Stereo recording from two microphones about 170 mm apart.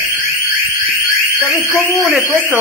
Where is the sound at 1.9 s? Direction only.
Centre (ahead or behind).